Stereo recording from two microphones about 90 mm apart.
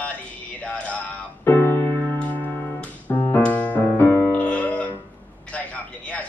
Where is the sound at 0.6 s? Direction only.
15° left (ahead or behind).